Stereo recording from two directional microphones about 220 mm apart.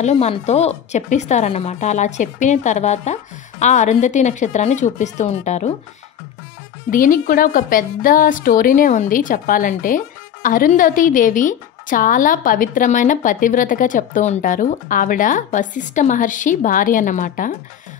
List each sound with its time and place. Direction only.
0.0 s a woman's voice: 30° left (ahead or behind)
6.9 s a woman's voice: 40° left (ahead or behind)